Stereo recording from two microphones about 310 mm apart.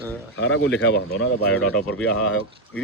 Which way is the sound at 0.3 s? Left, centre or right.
Left.